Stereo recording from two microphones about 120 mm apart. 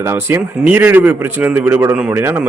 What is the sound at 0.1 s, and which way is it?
A man's voice, 20° right (ahead or behind).